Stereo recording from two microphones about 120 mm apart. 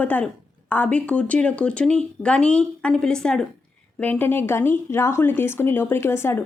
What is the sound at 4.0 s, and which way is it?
Speech, 15° left (ahead or behind).